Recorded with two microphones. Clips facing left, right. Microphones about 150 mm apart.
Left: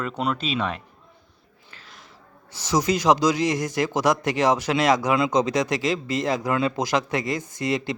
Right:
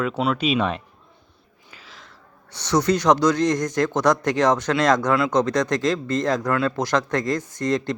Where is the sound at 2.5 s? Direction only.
5° left (ahead or behind).